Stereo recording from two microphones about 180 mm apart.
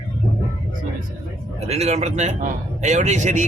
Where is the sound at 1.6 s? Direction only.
35° right (ahead or behind).